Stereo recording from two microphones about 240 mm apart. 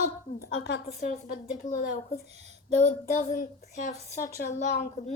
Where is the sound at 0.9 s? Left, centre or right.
Left.